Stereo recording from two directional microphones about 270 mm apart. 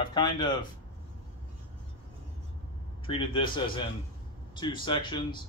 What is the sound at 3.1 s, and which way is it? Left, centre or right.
Speech, centre.